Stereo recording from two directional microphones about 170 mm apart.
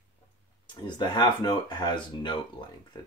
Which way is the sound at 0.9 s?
25° left (ahead or behind).